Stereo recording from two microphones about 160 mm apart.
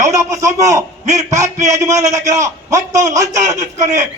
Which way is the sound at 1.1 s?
20° right (ahead or behind).